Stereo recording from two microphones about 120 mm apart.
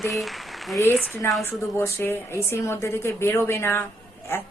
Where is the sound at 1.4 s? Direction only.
20° left (ahead or behind).